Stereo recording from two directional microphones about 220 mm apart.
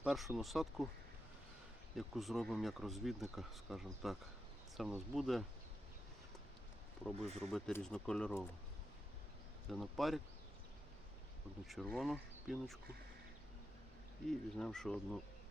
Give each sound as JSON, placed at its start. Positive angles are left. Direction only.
{"t": 0.0, "sound": "speech", "side_deg": 0}
{"t": 2.0, "sound": "speech", "side_deg": 0}
{"t": 7.0, "sound": "speech", "side_deg": 0}
{"t": 9.6, "sound": "speech", "side_deg": 0}
{"t": 11.6, "sound": "speech", "side_deg": 0}
{"t": 14.3, "sound": "speech", "side_deg": 0}